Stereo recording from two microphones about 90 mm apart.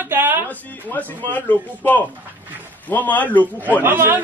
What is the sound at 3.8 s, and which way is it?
Speech, 25° right (ahead or behind).